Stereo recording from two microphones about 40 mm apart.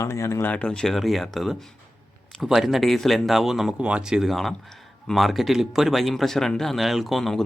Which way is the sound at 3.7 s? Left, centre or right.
Right.